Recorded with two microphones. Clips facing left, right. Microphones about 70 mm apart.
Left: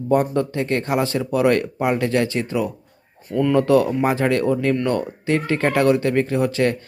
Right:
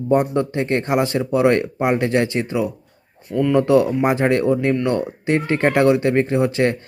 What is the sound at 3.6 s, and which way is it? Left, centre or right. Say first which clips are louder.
Speech: right 1 dB; centre.